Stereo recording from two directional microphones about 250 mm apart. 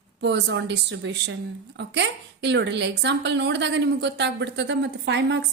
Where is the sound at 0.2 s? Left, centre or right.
Right.